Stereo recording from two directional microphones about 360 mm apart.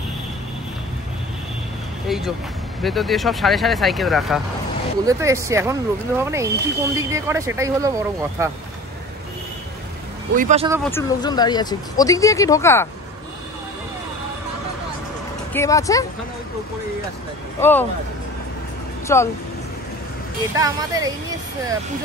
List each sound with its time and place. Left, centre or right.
2.0 s speech: centre
10.3 s speech: centre
10.8 s speech: centre
15.5 s speech: centre
17.6 s speech: centre
19.1 s speech: centre
20.5 s speech: centre